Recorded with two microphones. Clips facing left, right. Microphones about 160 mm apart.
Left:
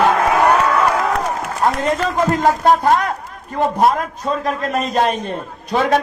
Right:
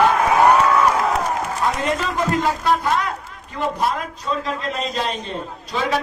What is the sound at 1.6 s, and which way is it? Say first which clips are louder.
A man's voice: left 6 dB; 45° left (ahead or behind).